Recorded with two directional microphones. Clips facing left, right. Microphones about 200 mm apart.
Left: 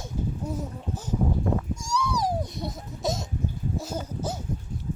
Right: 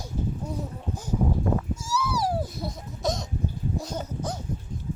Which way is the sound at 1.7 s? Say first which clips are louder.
Even; 5° right (ahead or behind).